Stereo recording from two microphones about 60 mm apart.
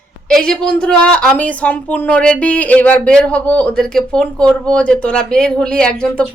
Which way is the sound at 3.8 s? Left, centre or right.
Centre.